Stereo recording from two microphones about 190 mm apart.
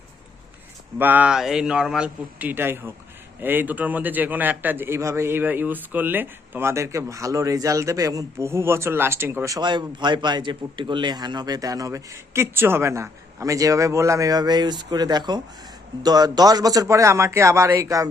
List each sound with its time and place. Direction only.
0.9 s a man's voice: 10° right (ahead or behind)